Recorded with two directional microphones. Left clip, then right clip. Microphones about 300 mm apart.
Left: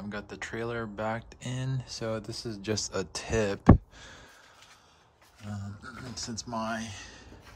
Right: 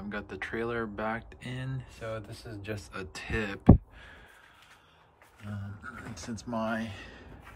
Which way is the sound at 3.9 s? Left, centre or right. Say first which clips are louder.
Left 2 dB; centre.